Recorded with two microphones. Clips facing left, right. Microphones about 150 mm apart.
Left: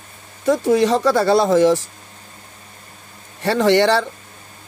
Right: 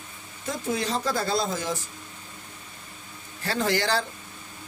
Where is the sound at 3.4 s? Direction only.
75° left (ahead or behind).